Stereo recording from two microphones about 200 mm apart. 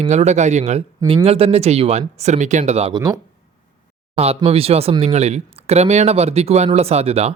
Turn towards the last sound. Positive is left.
turn(degrees=-30)  # may be behind; listen again after turning